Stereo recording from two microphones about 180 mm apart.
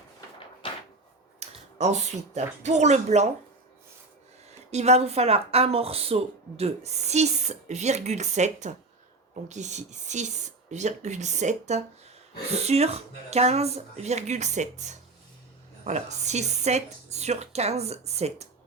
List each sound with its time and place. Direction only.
1.4 s speech: 40° right (ahead or behind)
4.7 s speech: 40° right (ahead or behind)